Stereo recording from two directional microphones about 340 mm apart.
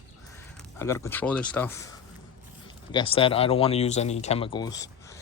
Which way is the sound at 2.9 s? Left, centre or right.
Centre.